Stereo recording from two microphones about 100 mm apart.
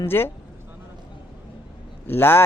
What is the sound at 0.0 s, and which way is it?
Speech, 25° left (ahead or behind).